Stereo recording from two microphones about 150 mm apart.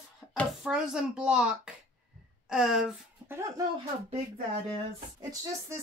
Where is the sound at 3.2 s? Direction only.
15° right (ahead or behind).